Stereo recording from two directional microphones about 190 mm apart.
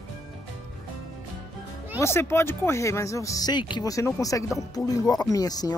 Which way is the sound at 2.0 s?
15° left (ahead or behind).